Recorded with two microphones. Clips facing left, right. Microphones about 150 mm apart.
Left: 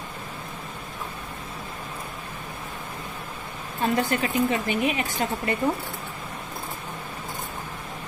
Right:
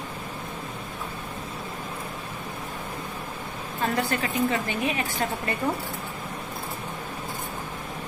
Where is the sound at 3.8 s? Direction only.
20° left (ahead or behind).